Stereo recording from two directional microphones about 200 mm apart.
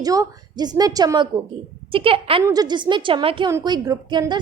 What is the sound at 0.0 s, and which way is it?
A woman's voice, 20° right (ahead or behind).